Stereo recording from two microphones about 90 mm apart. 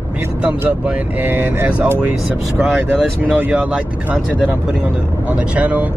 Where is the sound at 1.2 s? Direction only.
15° right (ahead or behind).